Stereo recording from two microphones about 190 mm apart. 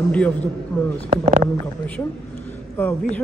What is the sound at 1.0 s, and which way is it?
Speech, 35° right (ahead or behind).